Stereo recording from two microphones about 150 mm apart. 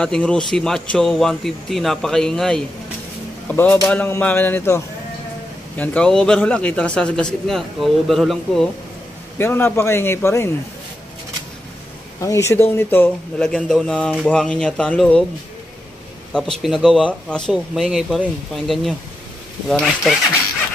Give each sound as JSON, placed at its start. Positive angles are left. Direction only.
{"t": 0.0, "sound": "speech", "side_deg": 5}
{"t": 3.9, "sound": "speech", "side_deg": 10}
{"t": 5.8, "sound": "speech", "side_deg": 5}
{"t": 9.4, "sound": "speech", "side_deg": 15}
{"t": 12.2, "sound": "speech", "side_deg": 20}
{"t": 16.3, "sound": "speech", "side_deg": 0}